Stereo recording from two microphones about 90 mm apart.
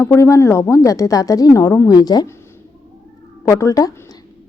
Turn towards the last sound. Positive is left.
turn(degrees=40)  # may be behind; listen again after turning